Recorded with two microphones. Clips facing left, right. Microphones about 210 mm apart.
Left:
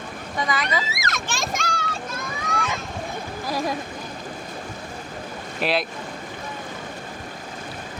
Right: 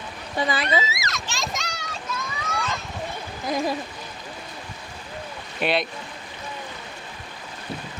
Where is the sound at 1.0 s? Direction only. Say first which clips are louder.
Left 3 dB; 50° left (ahead or behind).